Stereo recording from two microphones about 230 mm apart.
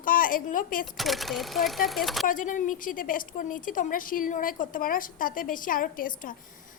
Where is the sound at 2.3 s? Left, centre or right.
Left.